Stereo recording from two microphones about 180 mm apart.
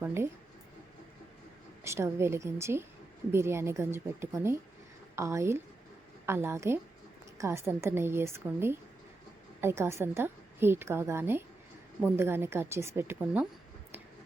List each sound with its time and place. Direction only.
0.0 s a woman's voice: 15° right (ahead or behind)
1.8 s a woman's voice: 15° right (ahead or behind)